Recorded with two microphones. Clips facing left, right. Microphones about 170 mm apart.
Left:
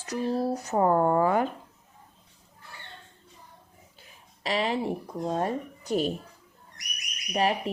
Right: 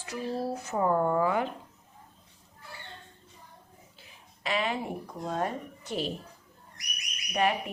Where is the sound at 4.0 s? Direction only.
35° left (ahead or behind).